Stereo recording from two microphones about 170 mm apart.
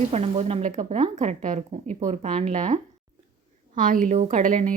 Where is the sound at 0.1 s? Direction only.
40° right (ahead or behind).